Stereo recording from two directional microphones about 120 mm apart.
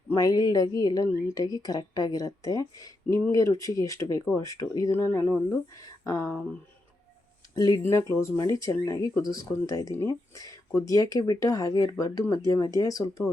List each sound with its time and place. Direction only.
0.1 s speech: 30° left (ahead or behind)
7.5 s speech: 30° left (ahead or behind)